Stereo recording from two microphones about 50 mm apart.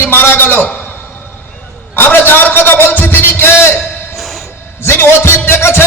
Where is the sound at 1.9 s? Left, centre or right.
Left.